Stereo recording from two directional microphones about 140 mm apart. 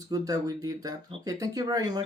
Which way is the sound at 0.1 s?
25° right (ahead or behind).